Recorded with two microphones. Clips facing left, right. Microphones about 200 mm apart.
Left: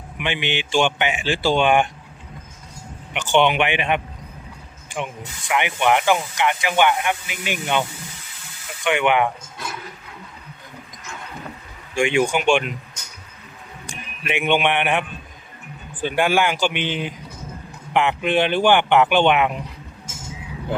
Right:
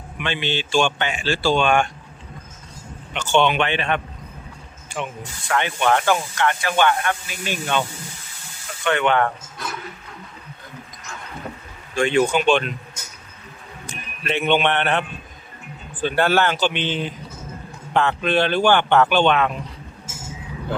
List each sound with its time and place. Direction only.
0.2 s speech: 15° left (ahead or behind)
3.1 s speech: 15° left (ahead or behind)
11.9 s speech: 15° left (ahead or behind)
13.8 s speech: 15° left (ahead or behind)
20.1 s vehicle: 5° right (ahead or behind)